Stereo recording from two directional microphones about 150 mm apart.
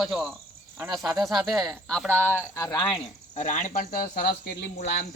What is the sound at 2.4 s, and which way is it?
Speech, 20° left (ahead or behind).